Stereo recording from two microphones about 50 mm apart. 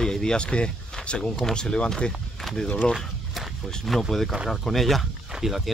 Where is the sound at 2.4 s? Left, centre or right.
Centre.